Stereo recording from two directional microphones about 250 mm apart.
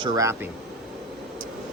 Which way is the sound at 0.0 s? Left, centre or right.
Centre.